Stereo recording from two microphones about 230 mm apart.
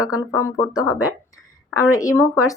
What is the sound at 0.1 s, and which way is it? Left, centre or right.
Speech, centre.